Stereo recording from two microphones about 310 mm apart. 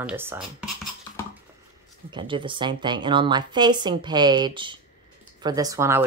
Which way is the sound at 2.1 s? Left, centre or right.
Centre.